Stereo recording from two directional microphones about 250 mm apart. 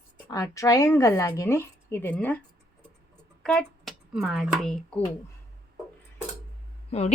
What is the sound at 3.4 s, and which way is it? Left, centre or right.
Speech, centre.